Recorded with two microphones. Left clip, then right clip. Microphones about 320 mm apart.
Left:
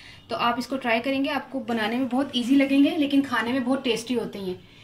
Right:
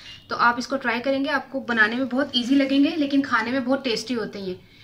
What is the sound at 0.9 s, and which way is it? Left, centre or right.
A woman's voice, centre.